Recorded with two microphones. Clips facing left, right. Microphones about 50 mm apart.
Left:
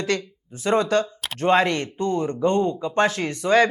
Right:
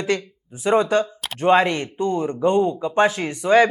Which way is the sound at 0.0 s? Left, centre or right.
Centre.